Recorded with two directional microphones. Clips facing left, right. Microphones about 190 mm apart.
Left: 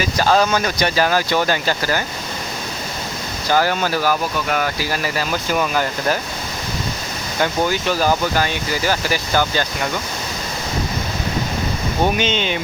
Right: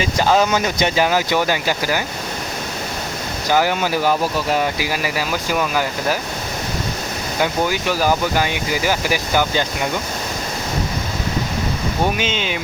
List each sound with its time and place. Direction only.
0.0 s speech: 20° right (ahead or behind)
3.5 s speech: 15° right (ahead or behind)
4.8 s speech: 10° right (ahead or behind)
7.3 s speech: 10° right (ahead or behind)
12.1 s speech: 5° right (ahead or behind)